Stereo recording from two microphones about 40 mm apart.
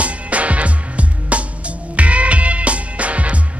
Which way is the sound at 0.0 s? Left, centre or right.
Right.